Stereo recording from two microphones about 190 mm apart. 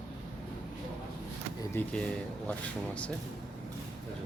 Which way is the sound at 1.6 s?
10° left (ahead or behind).